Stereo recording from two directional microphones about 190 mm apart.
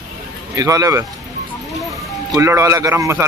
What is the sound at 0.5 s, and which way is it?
Speech, 15° right (ahead or behind).